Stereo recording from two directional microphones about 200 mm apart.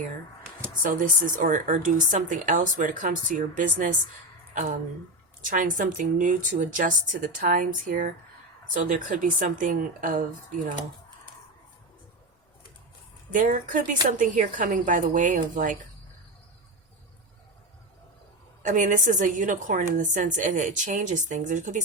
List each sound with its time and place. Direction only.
0.8 s a woman's voice: 40° right (ahead or behind)
5.5 s a woman's voice: 40° right (ahead or behind)
13.3 s a woman's voice: 40° right (ahead or behind)
18.6 s a woman's voice: 40° right (ahead or behind)